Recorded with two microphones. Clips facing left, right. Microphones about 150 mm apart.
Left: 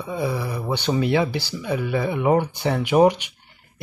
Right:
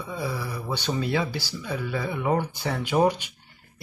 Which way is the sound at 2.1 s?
15° left (ahead or behind).